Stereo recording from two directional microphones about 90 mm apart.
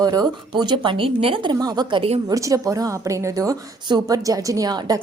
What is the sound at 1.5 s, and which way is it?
Speech, 45° right (ahead or behind).